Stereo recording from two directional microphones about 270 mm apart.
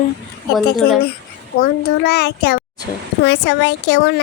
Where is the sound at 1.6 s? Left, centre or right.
Left.